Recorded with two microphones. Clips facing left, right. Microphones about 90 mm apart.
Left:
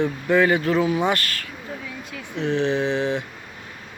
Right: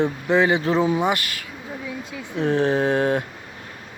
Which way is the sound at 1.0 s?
15° right (ahead or behind).